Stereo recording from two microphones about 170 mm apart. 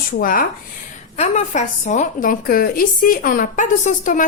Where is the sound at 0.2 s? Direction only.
55° left (ahead or behind).